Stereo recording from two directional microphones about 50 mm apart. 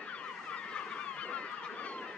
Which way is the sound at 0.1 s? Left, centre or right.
Left.